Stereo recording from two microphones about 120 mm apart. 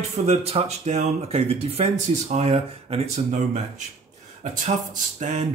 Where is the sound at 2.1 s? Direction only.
70° right (ahead or behind).